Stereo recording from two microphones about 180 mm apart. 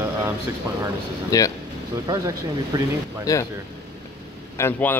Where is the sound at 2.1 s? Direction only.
20° right (ahead or behind).